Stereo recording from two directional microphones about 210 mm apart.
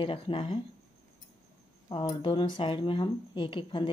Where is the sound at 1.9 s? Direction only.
25° left (ahead or behind).